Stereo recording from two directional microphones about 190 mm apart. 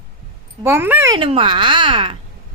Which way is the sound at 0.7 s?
10° right (ahead or behind).